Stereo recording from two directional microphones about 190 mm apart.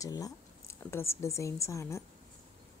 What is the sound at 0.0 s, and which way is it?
Speech, 20° left (ahead or behind).